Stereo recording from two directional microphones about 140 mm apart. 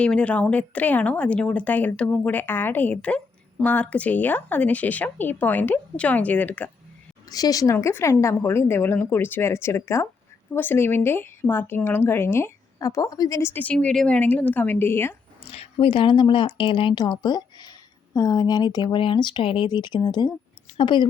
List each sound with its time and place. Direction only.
0.0 s speech: 10° left (ahead or behind)
7.3 s speech: 25° left (ahead or behind)
15.4 s a woman's voice: 40° left (ahead or behind)